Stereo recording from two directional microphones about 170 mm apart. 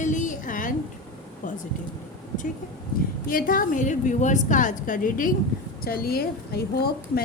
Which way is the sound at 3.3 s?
55° left (ahead or behind).